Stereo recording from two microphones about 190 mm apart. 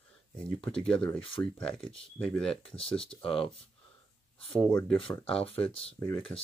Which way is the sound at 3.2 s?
30° left (ahead or behind).